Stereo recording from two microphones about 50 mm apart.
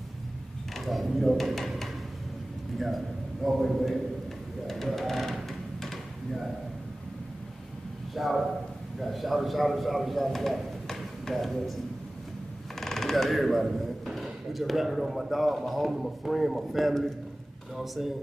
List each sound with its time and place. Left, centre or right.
0.7 s speech: centre
3.4 s a man's voice: centre
4.6 s a sound: centre
8.1 s a man's voice: centre
12.8 s a man's voice: centre